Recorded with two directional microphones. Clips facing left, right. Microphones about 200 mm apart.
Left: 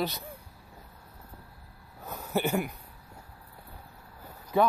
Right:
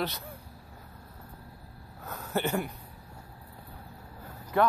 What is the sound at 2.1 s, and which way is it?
Speech, 10° left (ahead or behind).